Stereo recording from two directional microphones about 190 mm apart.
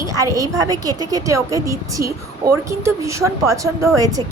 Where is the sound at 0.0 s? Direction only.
15° right (ahead or behind).